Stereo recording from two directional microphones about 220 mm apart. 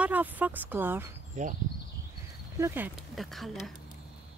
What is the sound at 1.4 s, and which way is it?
Speech, 35° right (ahead or behind).